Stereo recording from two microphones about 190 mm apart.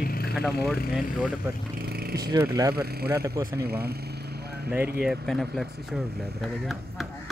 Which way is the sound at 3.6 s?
55° right (ahead or behind).